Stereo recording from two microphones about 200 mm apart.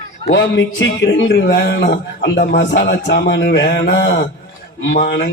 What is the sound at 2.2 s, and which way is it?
Music, 55° left (ahead or behind).